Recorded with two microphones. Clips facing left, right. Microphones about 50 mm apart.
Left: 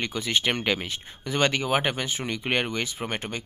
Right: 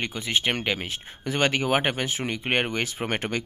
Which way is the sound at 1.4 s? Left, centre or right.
Right.